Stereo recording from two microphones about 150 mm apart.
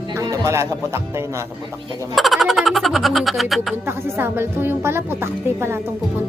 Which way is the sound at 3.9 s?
15° right (ahead or behind).